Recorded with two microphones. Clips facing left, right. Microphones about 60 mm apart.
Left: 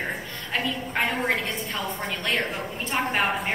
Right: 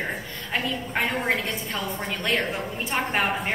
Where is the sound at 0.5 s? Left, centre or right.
Centre.